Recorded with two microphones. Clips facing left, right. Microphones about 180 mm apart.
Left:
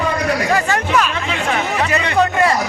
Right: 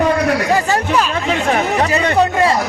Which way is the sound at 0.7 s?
35° right (ahead or behind).